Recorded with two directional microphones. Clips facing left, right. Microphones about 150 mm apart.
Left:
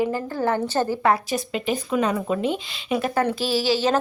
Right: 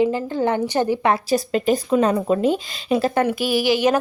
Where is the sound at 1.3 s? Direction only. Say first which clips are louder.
Right 6 dB; 40° right (ahead or behind).